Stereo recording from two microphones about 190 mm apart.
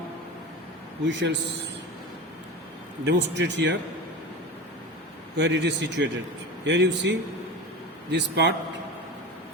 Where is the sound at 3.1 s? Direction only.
70° right (ahead or behind).